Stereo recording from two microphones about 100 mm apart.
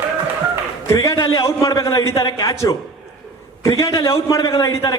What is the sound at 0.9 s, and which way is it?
A man's voice, 35° left (ahead or behind).